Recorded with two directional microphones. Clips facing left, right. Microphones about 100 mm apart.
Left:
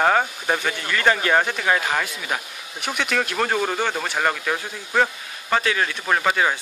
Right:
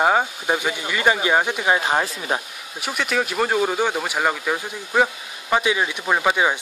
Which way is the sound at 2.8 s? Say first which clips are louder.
Right 1 dB; 5° right (ahead or behind).